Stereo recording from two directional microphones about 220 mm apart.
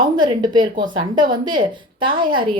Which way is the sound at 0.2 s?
20° right (ahead or behind).